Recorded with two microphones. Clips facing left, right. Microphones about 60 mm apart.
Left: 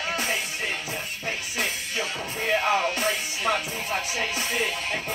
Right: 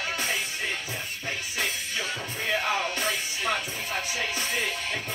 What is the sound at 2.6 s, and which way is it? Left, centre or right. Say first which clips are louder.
Music: left 5 dB; left.